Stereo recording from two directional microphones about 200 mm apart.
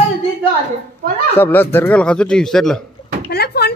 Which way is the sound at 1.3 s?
10° left (ahead or behind).